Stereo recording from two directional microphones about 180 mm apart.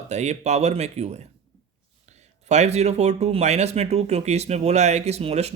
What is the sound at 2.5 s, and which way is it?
Speech, 40° right (ahead or behind).